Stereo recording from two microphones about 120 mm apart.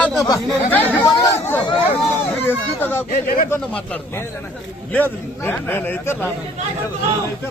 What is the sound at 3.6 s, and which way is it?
A man's voice, 10° left (ahead or behind).